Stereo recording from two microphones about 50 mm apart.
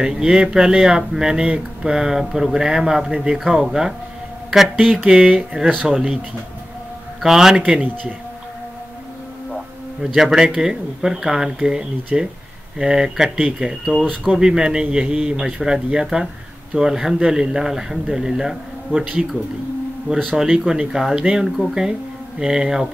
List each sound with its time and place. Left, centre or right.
0.0 s speech: centre
5.9 s speech: centre
7.2 s a man's voice: centre
7.5 s speech: centre
10.1 s speech: centre
13.9 s speech: centre
14.2 s speech: centre
20.3 s speech: centre
21.5 s speech: centre
22.4 s speech: centre